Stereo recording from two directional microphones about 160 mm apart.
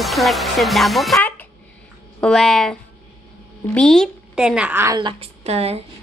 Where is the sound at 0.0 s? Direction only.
Centre (ahead or behind).